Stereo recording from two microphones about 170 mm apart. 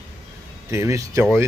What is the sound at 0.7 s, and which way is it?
Speech, 15° right (ahead or behind).